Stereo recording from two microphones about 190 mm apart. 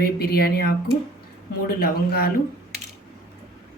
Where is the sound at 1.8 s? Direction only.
50° left (ahead or behind).